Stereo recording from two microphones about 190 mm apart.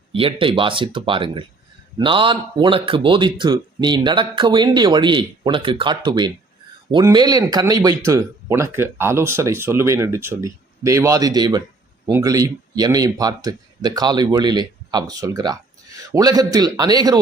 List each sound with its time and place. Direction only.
0.1 s speech: 30° right (ahead or behind)